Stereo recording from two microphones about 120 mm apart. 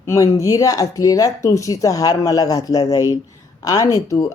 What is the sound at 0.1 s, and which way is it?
Speech, 25° left (ahead or behind).